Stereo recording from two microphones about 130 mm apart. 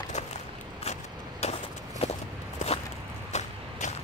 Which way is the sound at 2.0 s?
50° left (ahead or behind).